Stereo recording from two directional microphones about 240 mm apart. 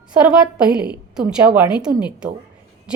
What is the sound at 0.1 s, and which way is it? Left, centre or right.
Speech, centre.